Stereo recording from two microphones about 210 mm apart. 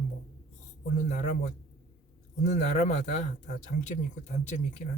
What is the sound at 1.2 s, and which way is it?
A man's voice, 35° left (ahead or behind).